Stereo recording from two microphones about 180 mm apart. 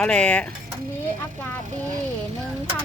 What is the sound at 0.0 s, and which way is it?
Speech, 5° left (ahead or behind).